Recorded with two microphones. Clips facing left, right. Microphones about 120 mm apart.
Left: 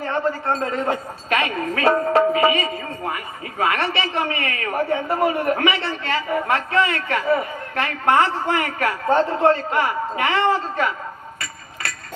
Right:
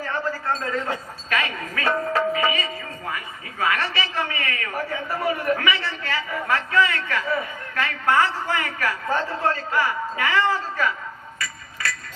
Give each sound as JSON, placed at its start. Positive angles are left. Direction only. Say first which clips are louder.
{"t": 0.0, "sound": "a sound", "louder": "left 4 dB", "side_deg": 25}
{"t": 0.6, "sound": "a man's voice", "louder": "left 4 dB", "side_deg": 30}
{"t": 3.6, "sound": "a man's voice", "louder": "left 3 dB", "side_deg": 25}
{"t": 4.9, "sound": "a man's voice", "louder": "left 7 dB", "side_deg": 55}
{"t": 5.2, "sound": "a man's voice", "louder": "left 2 dB", "side_deg": 25}
{"t": 11.3, "sound": "a sound", "louder": "right 1 dB", "side_deg": 25}